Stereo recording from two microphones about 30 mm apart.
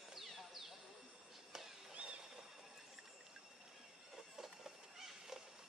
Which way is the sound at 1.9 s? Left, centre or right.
Right.